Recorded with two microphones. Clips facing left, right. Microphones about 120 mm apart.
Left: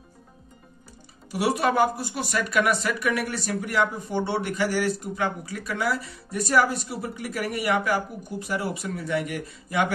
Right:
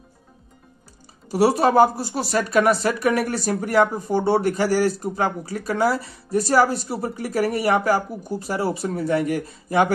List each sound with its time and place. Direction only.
1.3 s speech: 35° right (ahead or behind)